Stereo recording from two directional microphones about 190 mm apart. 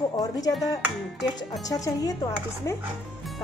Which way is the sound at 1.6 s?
20° left (ahead or behind).